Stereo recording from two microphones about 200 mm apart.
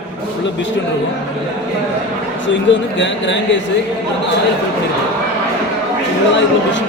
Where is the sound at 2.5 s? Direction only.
65° left (ahead or behind).